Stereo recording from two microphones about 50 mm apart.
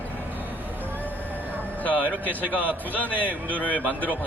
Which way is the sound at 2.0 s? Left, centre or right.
Right.